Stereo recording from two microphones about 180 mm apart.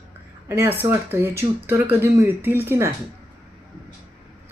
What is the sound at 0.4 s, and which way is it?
A woman's voice, 15° right (ahead or behind).